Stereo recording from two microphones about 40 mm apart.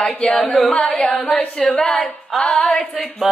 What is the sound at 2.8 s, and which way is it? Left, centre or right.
Speech, left.